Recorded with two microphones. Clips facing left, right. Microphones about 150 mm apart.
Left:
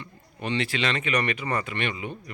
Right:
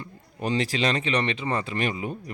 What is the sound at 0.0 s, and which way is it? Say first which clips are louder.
Speech: right 3 dB; 40° right (ahead or behind).